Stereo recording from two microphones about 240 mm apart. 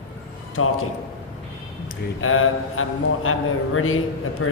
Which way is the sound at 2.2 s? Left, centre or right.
Left.